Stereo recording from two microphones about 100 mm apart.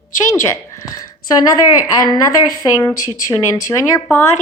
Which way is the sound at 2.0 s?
35° left (ahead or behind).